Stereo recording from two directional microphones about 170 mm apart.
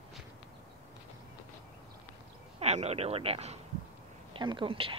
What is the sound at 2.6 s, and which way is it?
A woman's voice, 40° right (ahead or behind).